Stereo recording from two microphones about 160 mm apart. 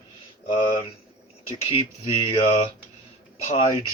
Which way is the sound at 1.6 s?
35° left (ahead or behind).